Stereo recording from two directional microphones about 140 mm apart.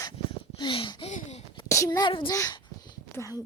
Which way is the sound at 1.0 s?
50° left (ahead or behind).